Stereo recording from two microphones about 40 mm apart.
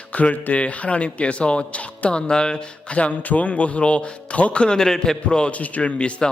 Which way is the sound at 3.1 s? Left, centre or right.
Left.